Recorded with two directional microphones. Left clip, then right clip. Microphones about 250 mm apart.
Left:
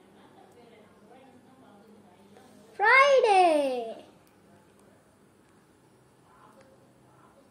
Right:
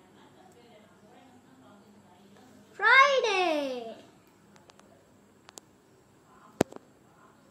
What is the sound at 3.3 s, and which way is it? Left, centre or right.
Babbling, centre.